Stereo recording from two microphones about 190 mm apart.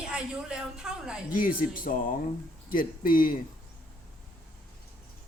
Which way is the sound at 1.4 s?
50° left (ahead or behind).